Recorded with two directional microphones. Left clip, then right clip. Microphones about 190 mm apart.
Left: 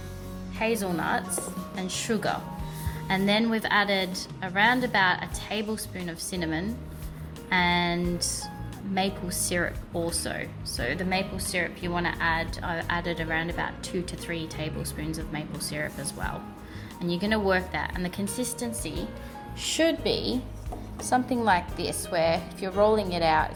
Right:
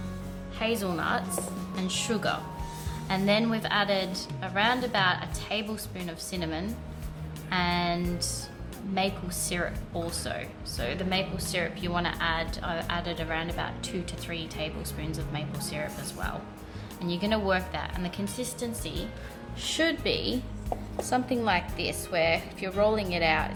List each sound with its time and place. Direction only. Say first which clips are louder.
0.6 s speech: left 2 dB; 15° left (ahead or behind)